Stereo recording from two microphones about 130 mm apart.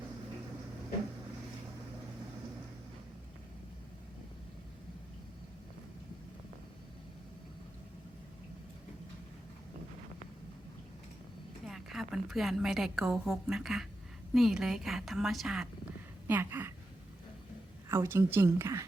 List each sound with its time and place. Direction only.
11.6 s a woman's voice: centre (ahead or behind)
16.2 s a sound: 15° right (ahead or behind)
17.8 s a woman's voice: 20° right (ahead or behind)